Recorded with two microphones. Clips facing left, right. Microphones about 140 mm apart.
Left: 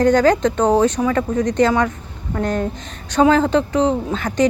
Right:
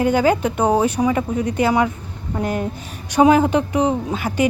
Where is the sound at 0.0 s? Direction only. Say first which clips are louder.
Left 3 dB; 10° right (ahead or behind).